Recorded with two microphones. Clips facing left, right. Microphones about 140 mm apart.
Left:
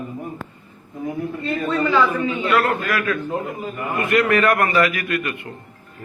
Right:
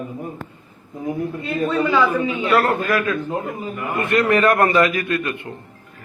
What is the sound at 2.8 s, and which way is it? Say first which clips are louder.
A man's voice: right 2 dB; 25° right (ahead or behind).